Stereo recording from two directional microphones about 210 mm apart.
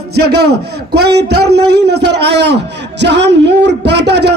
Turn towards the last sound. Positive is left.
turn(degrees=-55)  # may be behind; listen again after turning